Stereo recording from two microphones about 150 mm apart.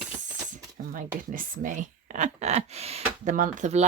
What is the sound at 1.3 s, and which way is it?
Speech, 65° right (ahead or behind).